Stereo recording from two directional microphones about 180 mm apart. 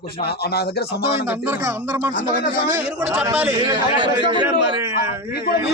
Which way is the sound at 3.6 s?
25° right (ahead or behind).